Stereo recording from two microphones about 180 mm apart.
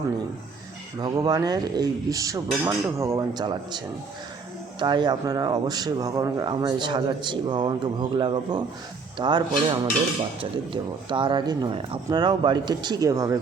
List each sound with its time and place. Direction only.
1.0 s speech: 20° right (ahead or behind)